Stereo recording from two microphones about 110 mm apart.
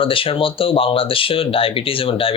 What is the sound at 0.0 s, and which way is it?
Speech, 55° left (ahead or behind).